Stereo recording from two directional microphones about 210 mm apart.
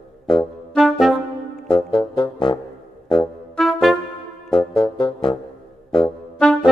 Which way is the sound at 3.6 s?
Centre (ahead or behind).